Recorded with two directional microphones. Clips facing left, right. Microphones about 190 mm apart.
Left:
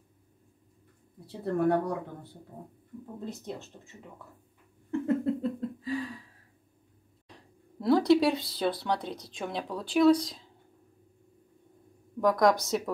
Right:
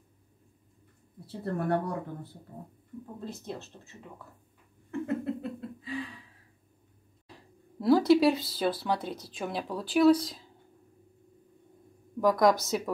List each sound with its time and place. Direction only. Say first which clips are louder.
1.4 s speech: left 3 dB; centre (ahead or behind)
5.0 s a sound: left 4 dB; 35° left (ahead or behind)
7.2 s speech: right 1 dB; 5° right (ahead or behind)
12.2 s speech: even; centre (ahead or behind)